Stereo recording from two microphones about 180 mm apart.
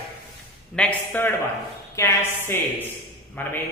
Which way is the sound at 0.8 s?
10° left (ahead or behind).